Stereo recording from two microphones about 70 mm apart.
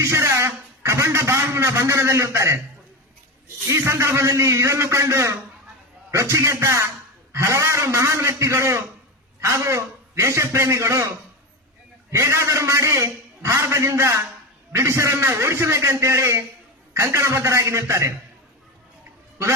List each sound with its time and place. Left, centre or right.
0.0 s a man's voice: right
3.7 s a man's voice: right
12.1 s a man's voice: right